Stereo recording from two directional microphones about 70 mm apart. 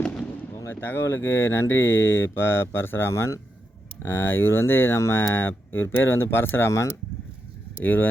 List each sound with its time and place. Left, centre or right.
0.7 s speech: left
4.0 s speech: left